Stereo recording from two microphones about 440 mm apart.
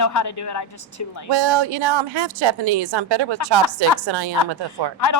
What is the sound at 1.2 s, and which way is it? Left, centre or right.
A woman's voice, right.